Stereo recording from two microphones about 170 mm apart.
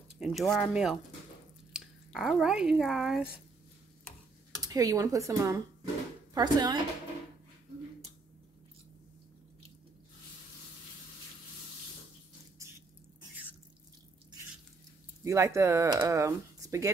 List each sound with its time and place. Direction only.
0.2 s speech: centre (ahead or behind)
4.6 s speech: 20° right (ahead or behind)
15.2 s speech: 15° right (ahead or behind)